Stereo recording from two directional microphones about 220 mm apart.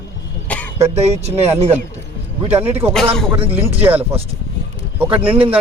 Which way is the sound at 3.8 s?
10° right (ahead or behind).